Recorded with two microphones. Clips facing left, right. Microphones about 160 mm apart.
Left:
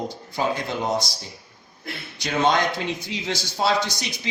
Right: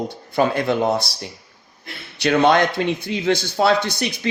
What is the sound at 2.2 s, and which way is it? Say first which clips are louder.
A man's voice: right 6 dB; 65° right (ahead or behind).